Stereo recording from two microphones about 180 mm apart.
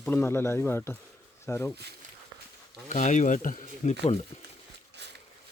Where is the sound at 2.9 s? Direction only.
45° left (ahead or behind).